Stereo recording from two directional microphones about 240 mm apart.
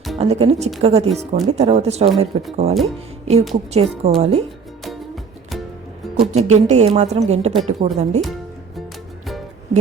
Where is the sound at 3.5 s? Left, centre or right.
Right.